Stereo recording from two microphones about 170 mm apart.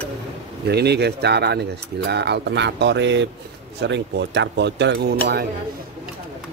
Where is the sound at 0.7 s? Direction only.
75° right (ahead or behind).